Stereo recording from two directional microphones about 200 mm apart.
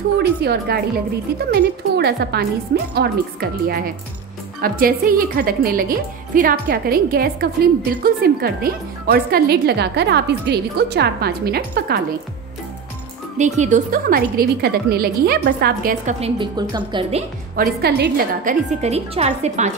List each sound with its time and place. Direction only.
0.2 s a woman's voice: 55° right (ahead or behind)
13.4 s a woman's voice: 35° right (ahead or behind)
16.2 s a woman's voice: 25° right (ahead or behind)
17.6 s a woman's voice: 55° right (ahead or behind); by 19.7 s 35° right (ahead or behind)